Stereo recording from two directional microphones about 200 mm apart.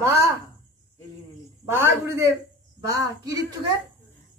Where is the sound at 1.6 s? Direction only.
10° right (ahead or behind).